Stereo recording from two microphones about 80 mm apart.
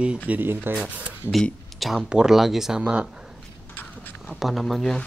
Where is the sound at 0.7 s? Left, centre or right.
Centre.